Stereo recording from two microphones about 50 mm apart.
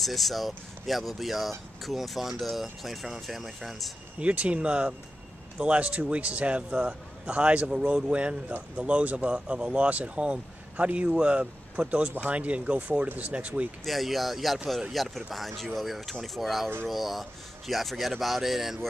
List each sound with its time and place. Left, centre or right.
0.0 s speech: centre
4.2 s speech: right
13.8 s speech: centre